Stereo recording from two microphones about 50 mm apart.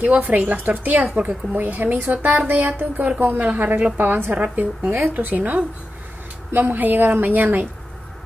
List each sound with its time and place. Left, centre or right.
0.0 s speech: right